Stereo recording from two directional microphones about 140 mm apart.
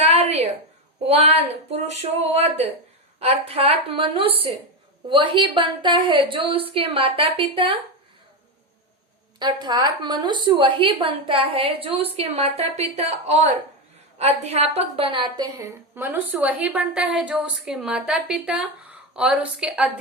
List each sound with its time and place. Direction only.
0.0 s a sound: 50° right (ahead or behind)
1.0 s a woman's voice: 45° right (ahead or behind)
9.4 s a woman's voice: 30° right (ahead or behind)
15.6 s a woman's voice: 15° right (ahead or behind)